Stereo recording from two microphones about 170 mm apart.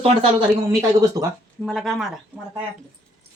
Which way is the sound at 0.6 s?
20° right (ahead or behind).